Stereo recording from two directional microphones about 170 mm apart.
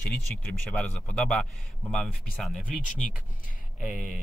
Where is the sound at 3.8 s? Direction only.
Centre (ahead or behind).